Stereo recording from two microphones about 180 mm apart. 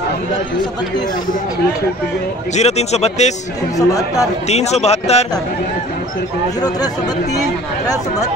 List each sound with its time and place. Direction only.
2.5 s speech: 35° left (ahead or behind)
3.7 s speech: 20° left (ahead or behind)
4.5 s speech: 35° left (ahead or behind)